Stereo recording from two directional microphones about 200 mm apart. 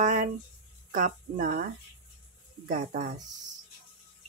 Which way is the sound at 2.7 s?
45° right (ahead or behind).